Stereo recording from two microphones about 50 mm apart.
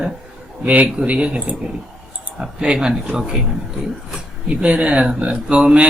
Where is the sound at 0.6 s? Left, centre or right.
Right.